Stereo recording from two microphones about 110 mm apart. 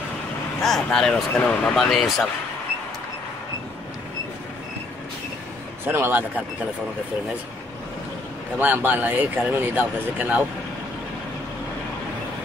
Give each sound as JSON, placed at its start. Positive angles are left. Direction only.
{"t": 0.6, "sound": "speech", "side_deg": 5}
{"t": 1.9, "sound": "speech", "side_deg": 0}
{"t": 5.9, "sound": "speech", "side_deg": -20}
{"t": 8.5, "sound": "speech", "side_deg": -15}